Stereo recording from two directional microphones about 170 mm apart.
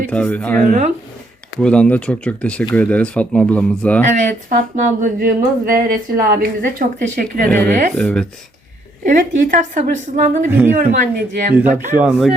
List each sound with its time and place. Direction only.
0.1 s speech: 10° left (ahead or behind)
0.6 s speech: 55° right (ahead or behind)
1.6 s speech: 5° left (ahead or behind)
4.0 s speech: 45° right (ahead or behind)
7.9 s speech: 5° left (ahead or behind)
9.0 s speech: 50° right (ahead or behind)
11.5 s speech: 10° right (ahead or behind)